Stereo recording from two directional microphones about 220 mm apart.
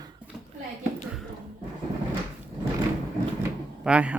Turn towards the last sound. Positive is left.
turn(degrees=-5)  # may be behind; listen again after turning